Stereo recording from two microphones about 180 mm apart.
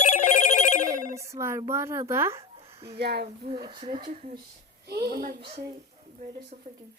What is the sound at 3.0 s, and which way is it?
Speech, 65° right (ahead or behind).